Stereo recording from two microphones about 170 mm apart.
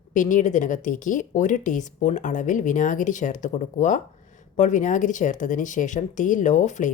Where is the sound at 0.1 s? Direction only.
50° left (ahead or behind).